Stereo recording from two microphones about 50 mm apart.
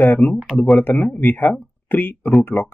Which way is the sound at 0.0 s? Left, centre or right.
Left.